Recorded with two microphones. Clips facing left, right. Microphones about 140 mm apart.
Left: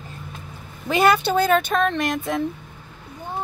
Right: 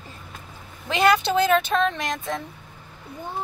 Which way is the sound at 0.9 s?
5° left (ahead or behind).